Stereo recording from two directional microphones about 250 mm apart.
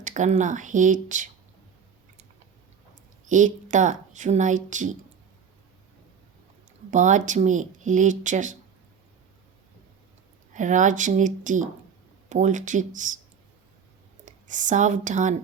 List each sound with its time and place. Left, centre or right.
0.0 s speech: right
3.2 s a woman's voice: right
6.9 s a woman's voice: right
10.5 s speech: right
14.3 s speech: right